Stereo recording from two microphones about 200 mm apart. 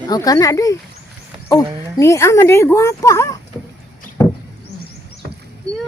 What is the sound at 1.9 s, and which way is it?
Speech, 15° left (ahead or behind).